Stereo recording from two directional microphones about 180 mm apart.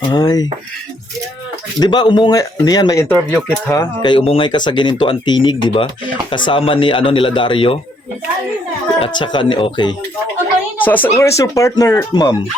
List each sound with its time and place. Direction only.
0.1 s speech: 20° left (ahead or behind)
1.8 s speech: 25° left (ahead or behind)
9.0 s speech: 25° left (ahead or behind)
10.8 s speech: 10° left (ahead or behind)